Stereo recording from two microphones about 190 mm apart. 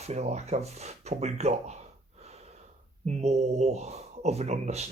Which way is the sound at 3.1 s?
35° right (ahead or behind).